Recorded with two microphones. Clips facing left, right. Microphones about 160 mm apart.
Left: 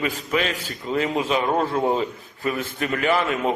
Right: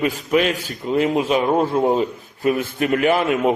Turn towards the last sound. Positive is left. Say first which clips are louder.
# right 4 dB
turn(degrees=-10)  # may be behind; listen again after turning